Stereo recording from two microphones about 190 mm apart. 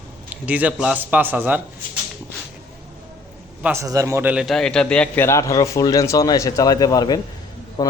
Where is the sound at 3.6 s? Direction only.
15° right (ahead or behind).